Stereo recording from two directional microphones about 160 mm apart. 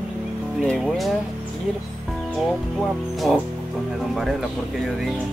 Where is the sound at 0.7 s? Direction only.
Centre (ahead or behind).